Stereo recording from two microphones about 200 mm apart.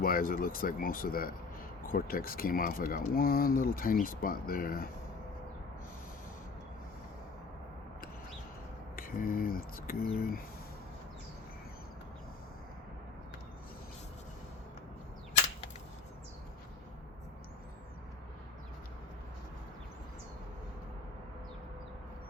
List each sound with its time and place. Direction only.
0.0 s speech: 45° left (ahead or behind)
9.0 s speech: 45° left (ahead or behind)